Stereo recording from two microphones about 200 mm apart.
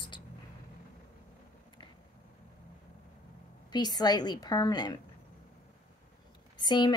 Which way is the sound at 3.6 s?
20° left (ahead or behind).